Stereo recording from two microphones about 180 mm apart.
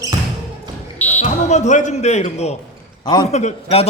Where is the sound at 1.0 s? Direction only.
10° left (ahead or behind).